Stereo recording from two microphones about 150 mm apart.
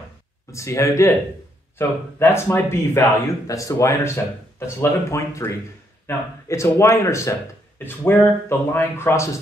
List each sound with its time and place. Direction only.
0.5 s a man's voice: 20° left (ahead or behind)